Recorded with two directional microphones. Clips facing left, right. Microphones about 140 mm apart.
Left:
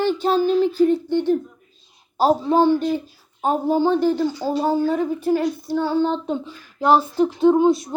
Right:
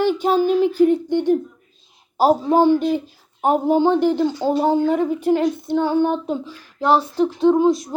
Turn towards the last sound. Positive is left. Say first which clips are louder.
# even
turn(degrees=0)  # may be behind; listen again after turning